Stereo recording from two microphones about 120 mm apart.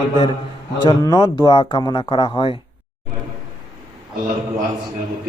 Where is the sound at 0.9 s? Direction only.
30° left (ahead or behind).